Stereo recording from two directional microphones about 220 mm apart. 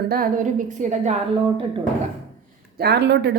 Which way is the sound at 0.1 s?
40° right (ahead or behind).